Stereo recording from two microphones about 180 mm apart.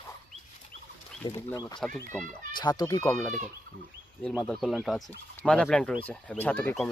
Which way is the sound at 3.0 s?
10° left (ahead or behind).